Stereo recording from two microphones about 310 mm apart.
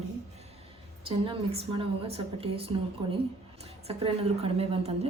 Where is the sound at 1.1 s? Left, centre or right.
Centre.